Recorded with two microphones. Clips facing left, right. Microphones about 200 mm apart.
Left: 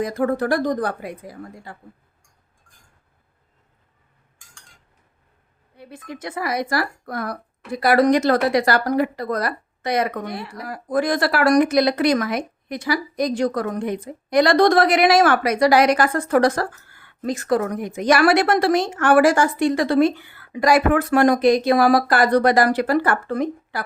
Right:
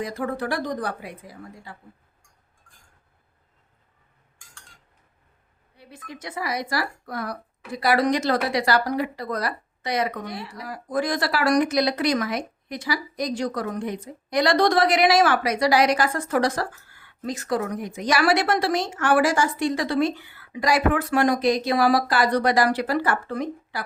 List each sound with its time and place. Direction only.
0.0 s speech: 50° left (ahead or behind)
5.7 s speech: 55° left (ahead or behind)